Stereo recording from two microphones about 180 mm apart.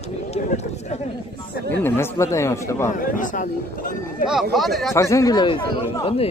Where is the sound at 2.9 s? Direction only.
45° left (ahead or behind).